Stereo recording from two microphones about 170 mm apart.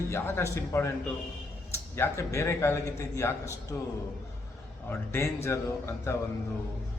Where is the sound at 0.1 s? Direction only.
15° left (ahead or behind).